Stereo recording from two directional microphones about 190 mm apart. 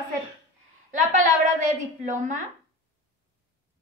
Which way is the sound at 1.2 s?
40° right (ahead or behind).